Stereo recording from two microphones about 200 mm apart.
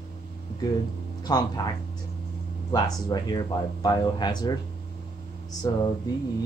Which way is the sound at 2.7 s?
20° left (ahead or behind).